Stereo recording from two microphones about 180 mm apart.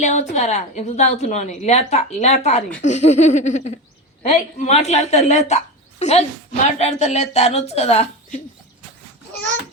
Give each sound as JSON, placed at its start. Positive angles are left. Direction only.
{"t": 0.0, "sound": "a woman's voice", "side_deg": 40}